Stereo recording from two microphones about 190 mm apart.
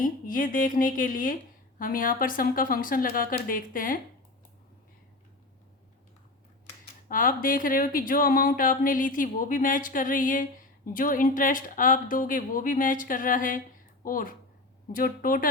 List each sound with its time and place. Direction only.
0.0 s speech: 45° left (ahead or behind)
7.1 s speech: 45° left (ahead or behind)